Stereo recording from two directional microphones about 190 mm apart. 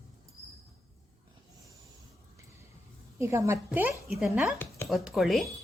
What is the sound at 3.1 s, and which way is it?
Speech, 15° right (ahead or behind).